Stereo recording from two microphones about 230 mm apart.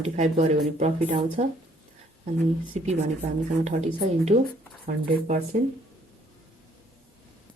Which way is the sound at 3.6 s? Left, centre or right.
Right.